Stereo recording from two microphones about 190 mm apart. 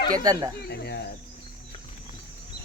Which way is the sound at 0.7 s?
60° left (ahead or behind).